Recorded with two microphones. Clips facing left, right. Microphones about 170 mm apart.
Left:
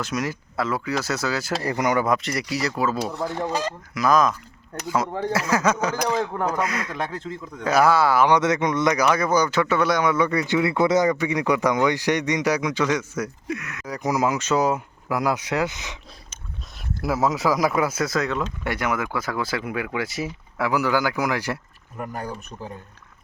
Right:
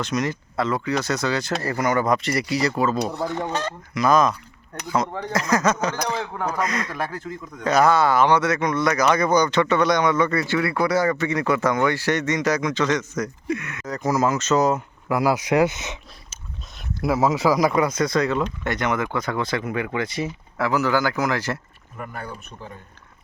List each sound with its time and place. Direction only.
0.0 s speech: 5° left (ahead or behind)
1.6 s speech: 15° left (ahead or behind)
2.0 s speech: centre (ahead or behind)
6.9 s speech: 25° left (ahead or behind)
7.6 s speech: 5° left (ahead or behind)
8.4 s speech: 20° left (ahead or behind)
15.2 s speech: 10° right (ahead or behind)
17.0 s speech: centre (ahead or behind)
22.0 s speech: 40° left (ahead or behind)